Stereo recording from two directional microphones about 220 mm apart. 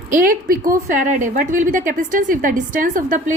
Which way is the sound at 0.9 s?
35° right (ahead or behind).